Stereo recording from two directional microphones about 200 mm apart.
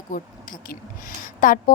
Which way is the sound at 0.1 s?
40° left (ahead or behind).